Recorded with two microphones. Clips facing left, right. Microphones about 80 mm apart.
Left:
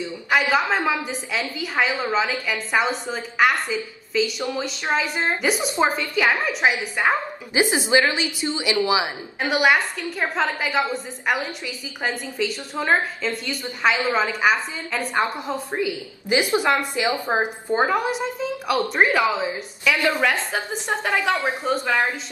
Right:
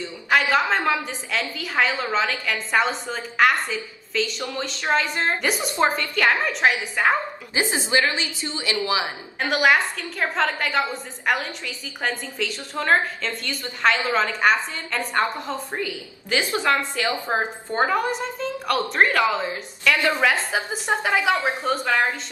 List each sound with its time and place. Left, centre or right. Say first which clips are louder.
0.3 s a woman's voice: even; centre
7.5 s a woman's voice: left 3 dB; centre
9.4 s a woman's voice: even; centre
20.2 s a woman's voice: right 1 dB; centre
21.6 s a woman's voice: left 1 dB; centre